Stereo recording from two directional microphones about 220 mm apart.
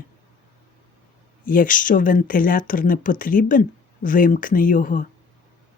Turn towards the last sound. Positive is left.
turn(degrees=35)  # may be behind; listen again after turning